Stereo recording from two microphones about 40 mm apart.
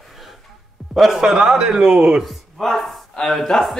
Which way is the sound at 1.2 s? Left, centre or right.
Centre.